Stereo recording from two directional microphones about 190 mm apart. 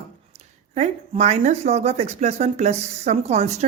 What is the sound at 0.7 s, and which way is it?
Speech, 35° right (ahead or behind).